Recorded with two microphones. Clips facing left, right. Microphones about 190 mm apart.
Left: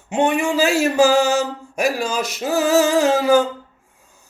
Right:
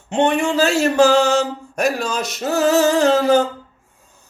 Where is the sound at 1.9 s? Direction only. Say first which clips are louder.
Even; 10° left (ahead or behind).